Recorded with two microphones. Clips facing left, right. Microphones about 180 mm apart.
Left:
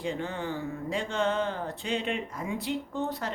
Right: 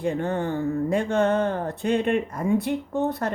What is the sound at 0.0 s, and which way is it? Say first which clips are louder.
Speech: right 7 dB; 55° right (ahead or behind).